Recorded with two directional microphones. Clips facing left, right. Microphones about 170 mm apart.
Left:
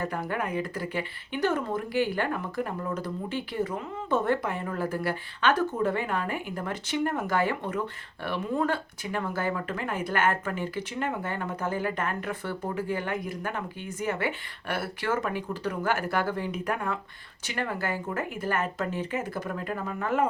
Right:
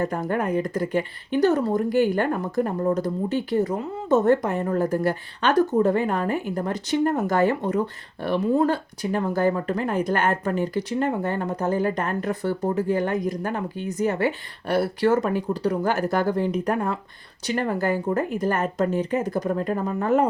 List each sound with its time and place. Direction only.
0.0 s speech: 45° right (ahead or behind)